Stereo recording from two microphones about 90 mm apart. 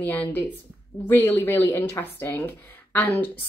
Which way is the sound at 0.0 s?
20° left (ahead or behind).